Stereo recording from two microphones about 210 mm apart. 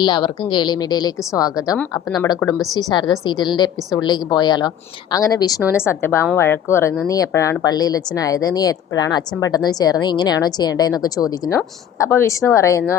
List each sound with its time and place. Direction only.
0.0 s a woman's voice: 20° left (ahead or behind)